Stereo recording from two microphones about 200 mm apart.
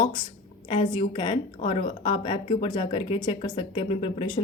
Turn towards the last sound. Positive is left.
turn(degrees=30)  # may be behind; listen again after turning